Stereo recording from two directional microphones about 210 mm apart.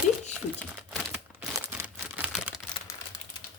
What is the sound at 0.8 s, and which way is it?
Crumpling, 5° right (ahead or behind).